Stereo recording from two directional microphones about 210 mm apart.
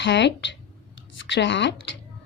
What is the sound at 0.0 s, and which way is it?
A woman's voice, 60° left (ahead or behind).